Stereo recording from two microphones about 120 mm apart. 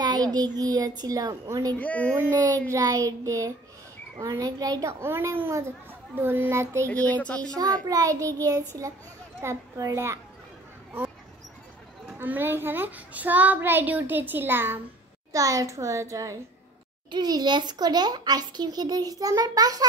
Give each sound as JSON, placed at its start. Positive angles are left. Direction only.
{"t": 0.0, "sound": "child singing", "side_deg": -35}
{"t": 0.6, "sound": "a child's voice", "side_deg": -30}
{"t": 1.8, "sound": "speech", "side_deg": 10}
{"t": 2.7, "sound": "a child's voice", "side_deg": -30}
{"t": 5.0, "sound": "a child's voice", "side_deg": -20}
{"t": 6.9, "sound": "speech", "side_deg": 10}
{"t": 7.9, "sound": "a child's voice", "side_deg": -30}
{"t": 12.1, "sound": "a child's voice", "side_deg": -15}